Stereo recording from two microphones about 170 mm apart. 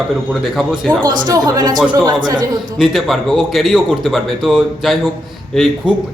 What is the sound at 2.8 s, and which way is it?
A man's voice, centre (ahead or behind).